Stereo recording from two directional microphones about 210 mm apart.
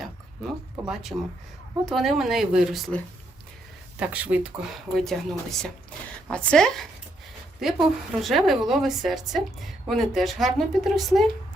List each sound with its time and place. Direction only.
0.0 s a woman's voice: centre (ahead or behind)
4.0 s a woman's voice: 5° right (ahead or behind)